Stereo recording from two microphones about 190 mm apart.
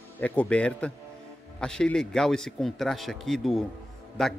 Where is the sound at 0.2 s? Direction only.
5° left (ahead or behind).